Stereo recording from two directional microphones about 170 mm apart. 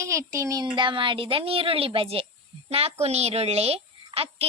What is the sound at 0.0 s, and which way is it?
A woman's voice, 15° right (ahead or behind).